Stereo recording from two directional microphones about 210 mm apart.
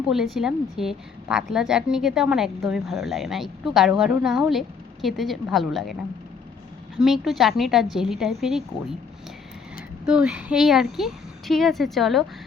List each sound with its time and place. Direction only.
0.1 s a woman's voice: centre (ahead or behind)
6.9 s a woman's voice: centre (ahead or behind)
10.1 s a woman's voice: 5° right (ahead or behind)